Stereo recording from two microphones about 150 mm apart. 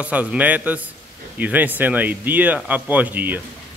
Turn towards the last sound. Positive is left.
turn(degrees=-10)  # may be behind; listen again after turning